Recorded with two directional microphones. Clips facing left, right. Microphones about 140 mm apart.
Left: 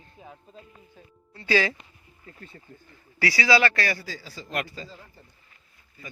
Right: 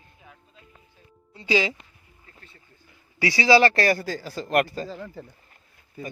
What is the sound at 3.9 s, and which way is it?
A man's voice, 50° right (ahead or behind).